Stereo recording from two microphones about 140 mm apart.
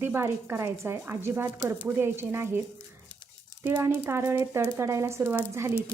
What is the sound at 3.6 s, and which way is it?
A woman's voice, 15° right (ahead or behind).